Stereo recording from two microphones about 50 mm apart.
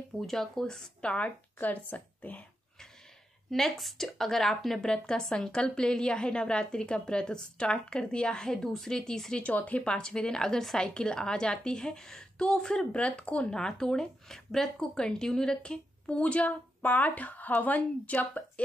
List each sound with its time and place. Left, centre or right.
0.2 s speech: centre; by 2.4 s left
3.4 s speech: centre
9.4 s speech: left
9.8 s speech: centre
13.5 s speech: centre; by 18.4 s left